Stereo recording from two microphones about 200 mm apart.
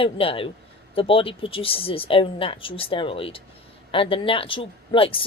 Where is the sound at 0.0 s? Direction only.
25° left (ahead or behind).